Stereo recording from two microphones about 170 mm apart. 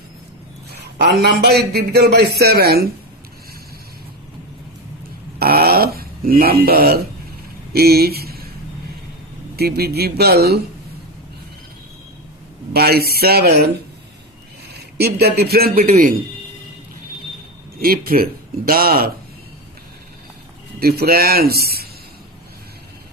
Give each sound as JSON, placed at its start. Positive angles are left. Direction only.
{"t": 0.7, "sound": "a man's voice", "side_deg": -80}
{"t": 5.4, "sound": "a sound", "side_deg": -65}
{"t": 9.6, "sound": "speech", "side_deg": -70}
{"t": 12.7, "sound": "speech", "side_deg": -65}
{"t": 14.7, "sound": "a man's voice", "side_deg": -70}
{"t": 17.7, "sound": "speech", "side_deg": -60}
{"t": 20.7, "sound": "speech", "side_deg": -65}